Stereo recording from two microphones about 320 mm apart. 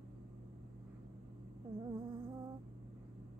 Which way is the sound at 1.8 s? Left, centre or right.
Centre.